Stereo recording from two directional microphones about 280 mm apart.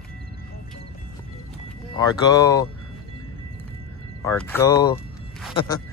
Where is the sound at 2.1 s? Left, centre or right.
Centre.